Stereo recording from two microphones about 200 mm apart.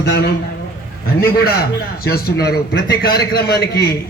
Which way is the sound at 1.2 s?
50° left (ahead or behind).